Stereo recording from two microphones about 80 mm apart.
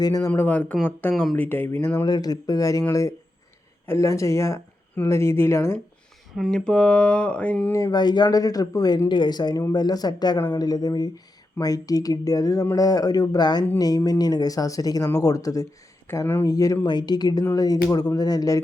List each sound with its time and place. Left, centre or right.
0.0 s speech: left
0.3 s a sound: centre
1.1 s speech: centre
1.4 s speech: left
2.0 s speech: left
3.8 s speech: left
6.5 s a sound: centre
7.9 s speech: left
9.0 s speech: left
16.2 s speech: left
16.5 s speech: left
16.8 s speech: left